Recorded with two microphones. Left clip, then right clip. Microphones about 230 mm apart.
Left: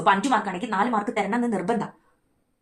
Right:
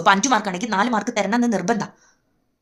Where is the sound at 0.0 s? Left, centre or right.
Right.